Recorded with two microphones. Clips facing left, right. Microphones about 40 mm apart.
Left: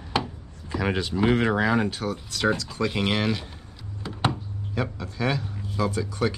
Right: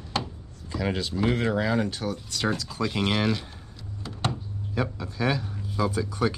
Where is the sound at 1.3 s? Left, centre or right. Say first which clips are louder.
Left 4 dB; left.